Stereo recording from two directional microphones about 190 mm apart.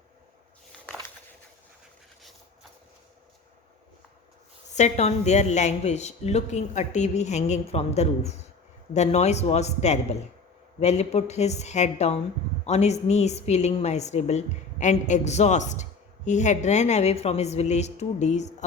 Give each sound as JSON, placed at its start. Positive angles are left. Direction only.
{"t": 4.7, "sound": "a woman's voice", "side_deg": 35}